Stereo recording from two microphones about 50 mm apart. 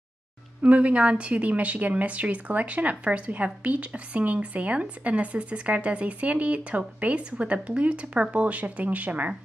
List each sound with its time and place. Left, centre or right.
0.6 s speech: right